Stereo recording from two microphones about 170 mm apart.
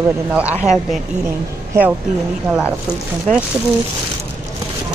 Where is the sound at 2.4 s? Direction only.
10° right (ahead or behind).